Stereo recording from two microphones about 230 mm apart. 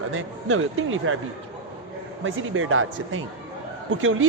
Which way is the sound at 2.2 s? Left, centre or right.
Right.